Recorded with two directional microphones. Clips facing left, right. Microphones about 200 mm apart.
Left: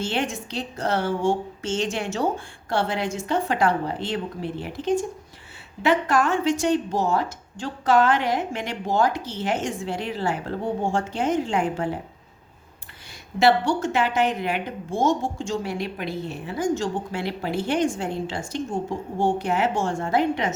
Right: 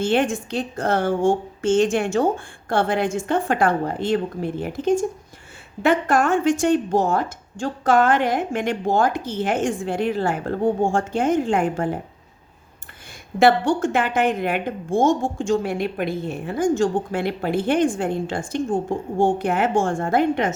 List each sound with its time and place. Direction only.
0.0 s a woman's voice: 50° right (ahead or behind)
13.4 s a woman's voice: 50° right (ahead or behind)